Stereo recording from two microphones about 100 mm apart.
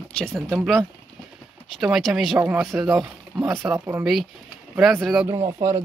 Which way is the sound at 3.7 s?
20° right (ahead or behind).